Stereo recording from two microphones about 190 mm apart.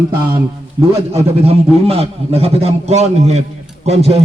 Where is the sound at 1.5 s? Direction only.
30° right (ahead or behind).